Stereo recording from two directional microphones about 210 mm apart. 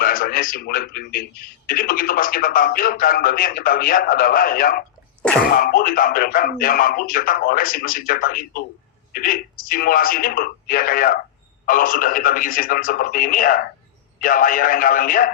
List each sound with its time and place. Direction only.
0.0 s a man's voice: 40° left (ahead or behind)